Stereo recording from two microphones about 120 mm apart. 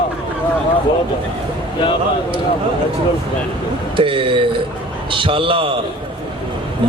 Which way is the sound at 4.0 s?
45° right (ahead or behind).